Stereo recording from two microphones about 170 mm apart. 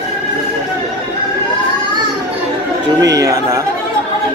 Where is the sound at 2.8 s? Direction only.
20° right (ahead or behind).